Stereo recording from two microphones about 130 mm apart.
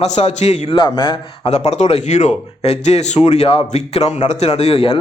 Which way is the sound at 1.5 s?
60° left (ahead or behind).